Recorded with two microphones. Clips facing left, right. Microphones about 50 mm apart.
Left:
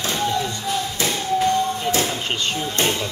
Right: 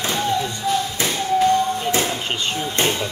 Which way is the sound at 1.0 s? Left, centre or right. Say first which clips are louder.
Right 1 dB; right.